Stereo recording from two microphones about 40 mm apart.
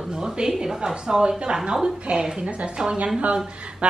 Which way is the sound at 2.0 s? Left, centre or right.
Right.